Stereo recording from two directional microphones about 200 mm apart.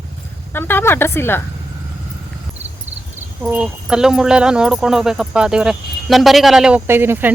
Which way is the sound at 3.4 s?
5° right (ahead or behind).